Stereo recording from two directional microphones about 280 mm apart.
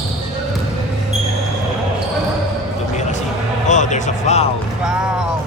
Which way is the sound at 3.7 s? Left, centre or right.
Left.